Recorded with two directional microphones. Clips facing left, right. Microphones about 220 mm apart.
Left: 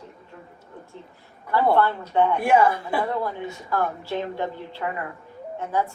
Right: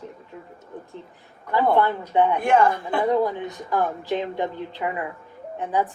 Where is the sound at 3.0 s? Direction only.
15° right (ahead or behind).